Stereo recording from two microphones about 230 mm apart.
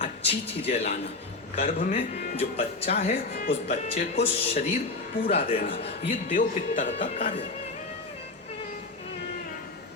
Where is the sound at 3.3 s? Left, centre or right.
Left.